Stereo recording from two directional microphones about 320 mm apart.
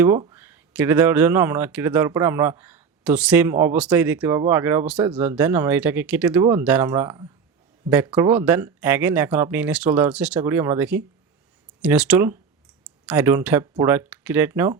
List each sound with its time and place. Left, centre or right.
0.0 s speech: centre